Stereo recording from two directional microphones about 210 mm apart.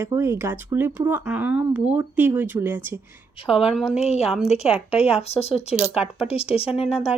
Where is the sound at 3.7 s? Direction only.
5° right (ahead or behind).